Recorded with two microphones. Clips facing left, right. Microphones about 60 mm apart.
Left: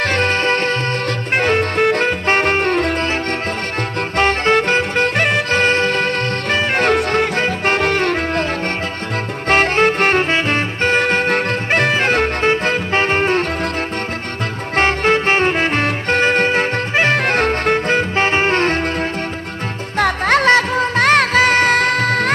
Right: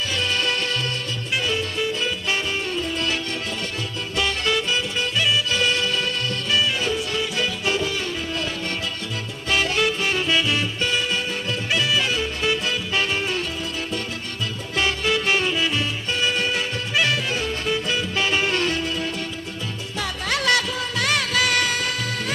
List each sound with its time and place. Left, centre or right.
0.0 s music: left
4.2 s music: left
9.5 s music: left
14.8 s music: left
17.2 s music: left
20.0 s music: left